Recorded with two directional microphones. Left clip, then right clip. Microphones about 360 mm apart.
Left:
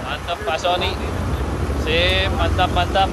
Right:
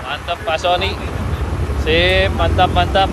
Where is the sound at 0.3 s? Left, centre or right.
Centre.